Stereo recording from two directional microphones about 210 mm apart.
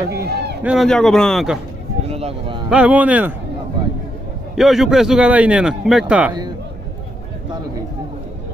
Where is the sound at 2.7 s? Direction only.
5° right (ahead or behind).